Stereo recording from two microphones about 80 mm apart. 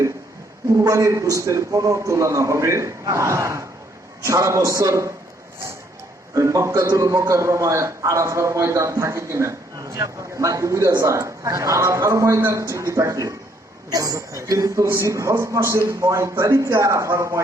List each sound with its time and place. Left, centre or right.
0.9 s a man's voice: right
6.3 s a man's voice: right